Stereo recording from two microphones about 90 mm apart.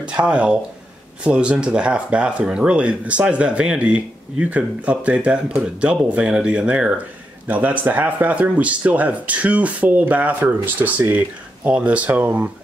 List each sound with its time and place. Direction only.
0.0 s speech: 10° right (ahead or behind)